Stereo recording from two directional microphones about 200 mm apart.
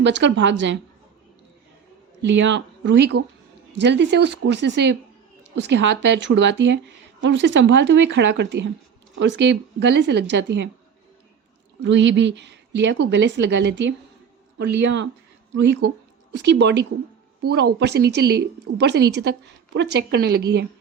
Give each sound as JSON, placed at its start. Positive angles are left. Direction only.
{"t": 0.0, "sound": "speech", "side_deg": -65}
{"t": 2.2, "sound": "speech", "side_deg": -65}
{"t": 11.8, "sound": "speech", "side_deg": -60}